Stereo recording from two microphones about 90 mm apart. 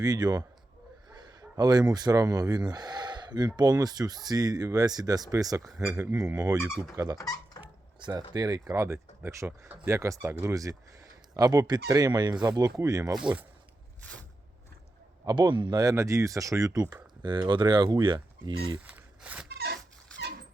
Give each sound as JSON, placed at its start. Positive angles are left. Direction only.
{"t": 0.0, "sound": "speech", "side_deg": -45}
{"t": 5.8, "sound": "speech", "side_deg": -25}
{"t": 6.1, "sound": "speech", "side_deg": -40}
{"t": 7.2, "sound": "dog", "side_deg": 40}
{"t": 7.9, "sound": "speech", "side_deg": -55}
{"t": 10.5, "sound": "speech", "side_deg": -40}
{"t": 13.1, "sound": "speech", "side_deg": -10}
{"t": 14.0, "sound": "a sound", "side_deg": 15}
{"t": 15.4, "sound": "speech", "side_deg": -60}
{"t": 17.2, "sound": "speech", "side_deg": -60}
{"t": 18.8, "sound": "speech", "side_deg": -15}